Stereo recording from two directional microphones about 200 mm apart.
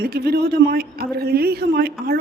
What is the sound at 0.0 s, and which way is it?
A woman's voice, 50° right (ahead or behind).